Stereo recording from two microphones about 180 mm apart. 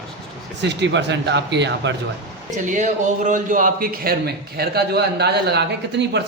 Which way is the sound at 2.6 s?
45° right (ahead or behind).